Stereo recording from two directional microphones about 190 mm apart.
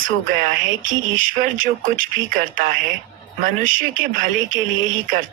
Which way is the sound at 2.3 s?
45° right (ahead or behind).